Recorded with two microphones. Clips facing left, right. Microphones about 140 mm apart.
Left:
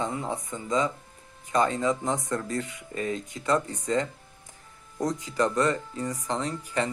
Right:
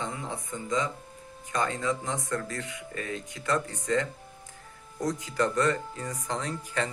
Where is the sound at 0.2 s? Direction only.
35° left (ahead or behind).